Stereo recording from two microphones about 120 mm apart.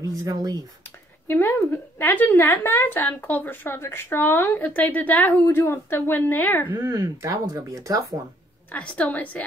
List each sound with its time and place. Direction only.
0.0 s speech: 30° right (ahead or behind)
1.2 s a woman's voice: 20° left (ahead or behind)
5.4 s a woman's voice: 25° left (ahead or behind)
6.7 s speech: 30° right (ahead or behind)
8.7 s a woman's voice: 10° left (ahead or behind)